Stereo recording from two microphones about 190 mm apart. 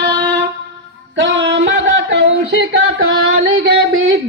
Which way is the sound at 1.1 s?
75° right (ahead or behind).